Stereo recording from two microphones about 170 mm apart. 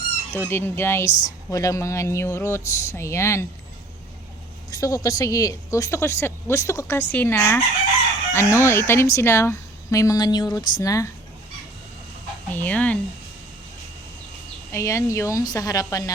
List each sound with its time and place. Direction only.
0.3 s a woman's voice: 15° left (ahead or behind)
4.7 s a woman's voice: 20° left (ahead or behind)
12.5 s a woman's voice: 10° left (ahead or behind)
14.7 s speech: 15° left (ahead or behind)